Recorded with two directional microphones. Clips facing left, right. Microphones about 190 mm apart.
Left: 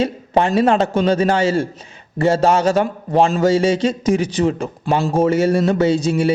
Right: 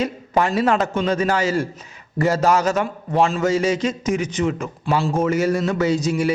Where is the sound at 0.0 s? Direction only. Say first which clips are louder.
Left 3 dB; 30° left (ahead or behind).